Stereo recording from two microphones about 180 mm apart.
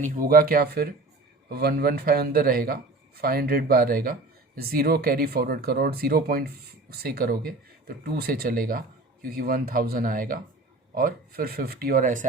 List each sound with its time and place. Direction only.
0.0 s a man's voice: 50° right (ahead or behind)